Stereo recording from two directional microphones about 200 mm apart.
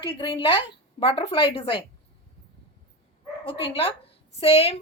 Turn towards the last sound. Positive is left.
turn(degrees=30)  # may be behind; listen again after turning